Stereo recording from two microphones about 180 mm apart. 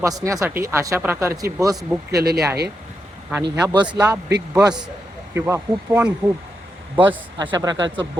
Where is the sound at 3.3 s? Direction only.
20° right (ahead or behind).